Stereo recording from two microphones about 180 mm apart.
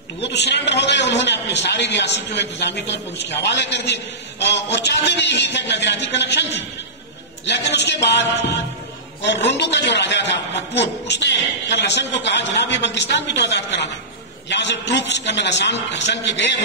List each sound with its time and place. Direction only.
0.2 s a man's voice: 70° left (ahead or behind)
7.4 s a man's voice: 70° left (ahead or behind)